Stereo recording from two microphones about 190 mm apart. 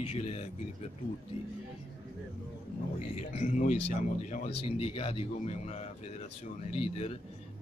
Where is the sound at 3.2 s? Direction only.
35° left (ahead or behind).